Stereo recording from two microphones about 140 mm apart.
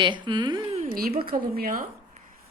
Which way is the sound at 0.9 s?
90° right.